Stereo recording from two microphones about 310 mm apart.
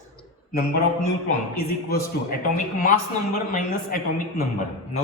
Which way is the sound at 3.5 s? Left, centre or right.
Left.